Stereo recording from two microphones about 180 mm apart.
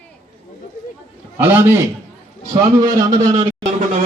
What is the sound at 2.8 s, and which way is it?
Speech, 20° right (ahead or behind).